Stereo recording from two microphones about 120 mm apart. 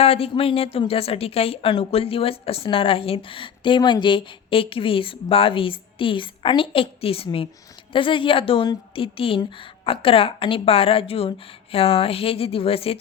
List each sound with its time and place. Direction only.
0.0 s a woman's voice: 55° left (ahead or behind)